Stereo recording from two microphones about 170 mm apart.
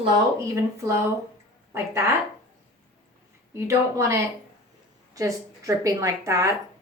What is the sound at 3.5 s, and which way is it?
A woman's voice, 15° right (ahead or behind).